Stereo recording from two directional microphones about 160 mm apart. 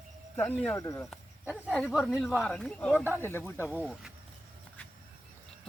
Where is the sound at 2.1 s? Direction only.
Centre (ahead or behind); by 3.7 s 15° left (ahead or behind).